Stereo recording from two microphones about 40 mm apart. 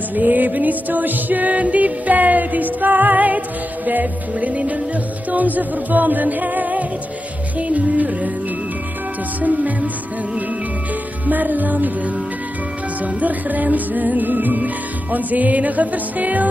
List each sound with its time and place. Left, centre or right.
0.1 s music: right
9.4 s music: right
11.2 s music: right
13.0 s music: right